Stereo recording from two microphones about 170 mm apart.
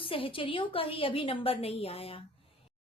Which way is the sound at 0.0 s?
30° left (ahead or behind).